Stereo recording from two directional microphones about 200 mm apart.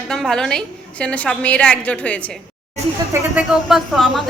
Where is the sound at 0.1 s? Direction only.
5° left (ahead or behind).